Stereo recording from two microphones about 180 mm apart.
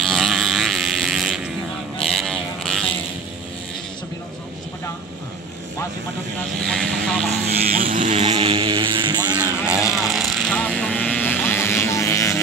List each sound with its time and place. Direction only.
0.0 s livestock: centre (ahead or behind)
2.0 s a sound: centre (ahead or behind)
6.6 s vehicle: 5° left (ahead or behind)
7.4 s vehicle: 50° right (ahead or behind); by 9.4 s 25° right (ahead or behind)
9.4 s vehicle: 5° right (ahead or behind); by 12.4 s 15° left (ahead or behind)